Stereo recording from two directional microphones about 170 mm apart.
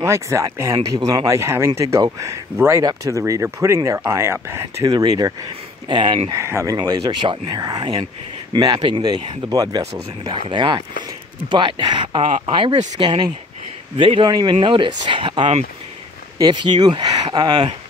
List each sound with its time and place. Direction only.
0.0 s speech: 15° right (ahead or behind)
6.3 s speech: 15° right (ahead or behind)
12.3 s speech: 45° right (ahead or behind)
12.5 s speech: 25° right (ahead or behind)